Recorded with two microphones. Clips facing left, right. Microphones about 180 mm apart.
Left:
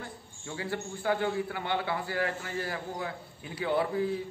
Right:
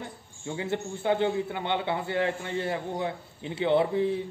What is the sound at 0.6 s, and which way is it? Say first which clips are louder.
A man's voice: right 4 dB; 25° right (ahead or behind).